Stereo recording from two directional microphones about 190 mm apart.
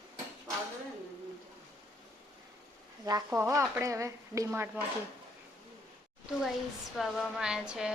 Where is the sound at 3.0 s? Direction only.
15° right (ahead or behind).